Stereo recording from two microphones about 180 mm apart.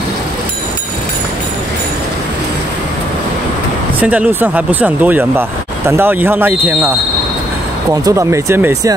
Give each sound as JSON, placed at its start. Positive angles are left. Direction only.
{"t": 4.0, "sound": "speech", "side_deg": -10}
{"t": 7.9, "sound": "speech", "side_deg": -20}